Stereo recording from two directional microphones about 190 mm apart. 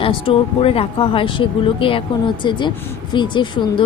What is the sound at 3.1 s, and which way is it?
Speech, 25° left (ahead or behind).